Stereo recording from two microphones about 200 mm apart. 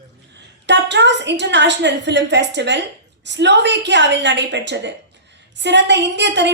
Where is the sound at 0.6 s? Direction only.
60° right (ahead or behind).